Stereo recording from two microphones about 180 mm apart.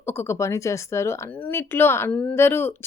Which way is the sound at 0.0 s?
15° left (ahead or behind).